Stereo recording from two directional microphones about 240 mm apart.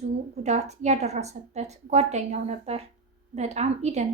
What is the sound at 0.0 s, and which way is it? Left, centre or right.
A woman's voice, right.